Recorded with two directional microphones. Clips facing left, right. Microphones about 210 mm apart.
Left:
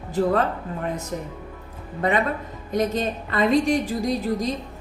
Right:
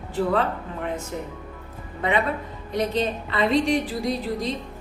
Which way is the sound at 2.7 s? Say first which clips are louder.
Left 1 dB; 45° left (ahead or behind).